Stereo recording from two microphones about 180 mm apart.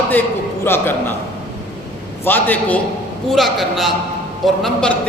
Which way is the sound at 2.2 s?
10° left (ahead or behind).